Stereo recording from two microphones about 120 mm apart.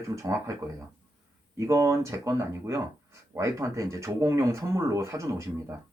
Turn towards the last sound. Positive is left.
turn(degrees=-25)  # may be behind; listen again after turning